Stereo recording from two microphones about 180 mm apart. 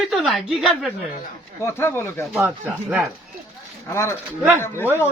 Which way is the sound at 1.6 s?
15° left (ahead or behind).